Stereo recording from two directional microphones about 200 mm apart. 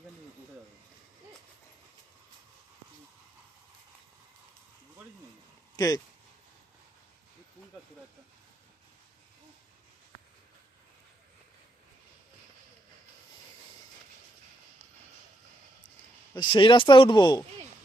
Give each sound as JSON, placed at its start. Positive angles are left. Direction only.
{"t": 5.7, "sound": "speech", "side_deg": 15}
{"t": 16.3, "sound": "speech", "side_deg": 25}